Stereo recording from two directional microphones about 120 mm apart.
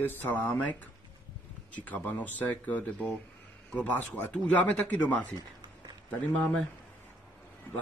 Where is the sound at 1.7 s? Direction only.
15° left (ahead or behind).